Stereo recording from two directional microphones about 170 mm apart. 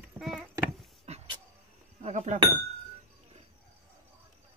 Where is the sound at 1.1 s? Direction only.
40° right (ahead or behind).